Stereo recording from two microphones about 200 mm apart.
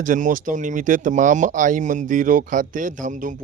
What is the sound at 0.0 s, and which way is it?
Speech, 40° right (ahead or behind).